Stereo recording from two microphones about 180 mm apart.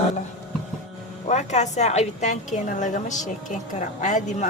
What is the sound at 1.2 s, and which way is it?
A man's voice, 40° left (ahead or behind).